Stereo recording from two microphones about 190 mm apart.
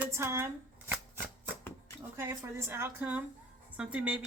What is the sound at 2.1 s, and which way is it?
Speech, 15° right (ahead or behind).